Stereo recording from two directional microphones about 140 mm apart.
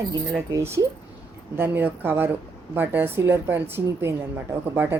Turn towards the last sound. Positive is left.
turn(degrees=-15)  # may be behind; listen again after turning